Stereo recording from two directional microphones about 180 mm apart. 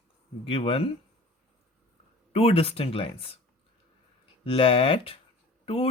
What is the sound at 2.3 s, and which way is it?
Speech, 30° left (ahead or behind).